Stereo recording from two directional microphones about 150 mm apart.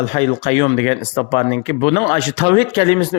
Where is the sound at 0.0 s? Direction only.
45° left (ahead or behind).